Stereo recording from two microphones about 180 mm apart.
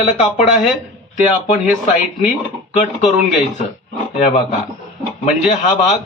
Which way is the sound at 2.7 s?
40° left (ahead or behind).